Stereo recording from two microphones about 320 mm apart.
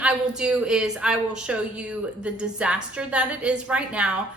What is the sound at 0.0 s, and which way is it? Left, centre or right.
A woman's voice, centre.